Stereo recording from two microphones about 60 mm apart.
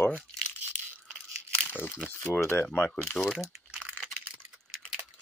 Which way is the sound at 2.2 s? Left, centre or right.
Left.